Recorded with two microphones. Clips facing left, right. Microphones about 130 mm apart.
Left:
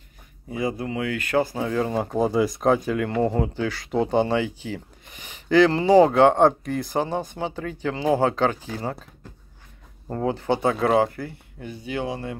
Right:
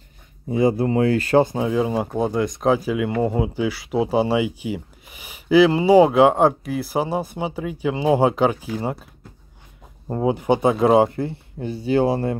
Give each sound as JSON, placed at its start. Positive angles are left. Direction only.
{"t": 0.5, "sound": "speech", "side_deg": -30}